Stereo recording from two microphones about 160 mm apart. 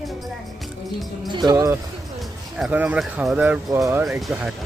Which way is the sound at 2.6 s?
10° right (ahead or behind).